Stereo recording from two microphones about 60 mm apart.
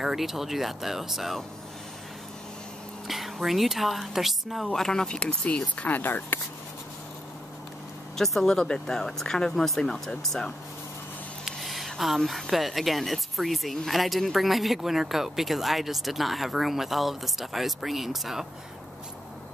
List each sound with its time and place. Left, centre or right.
0.0 s speech: centre
3.1 s speech: centre
4.7 s speech: centre; by 6.2 s left
8.2 s speech: centre
11.4 s a sound: centre
12.3 s speech: centre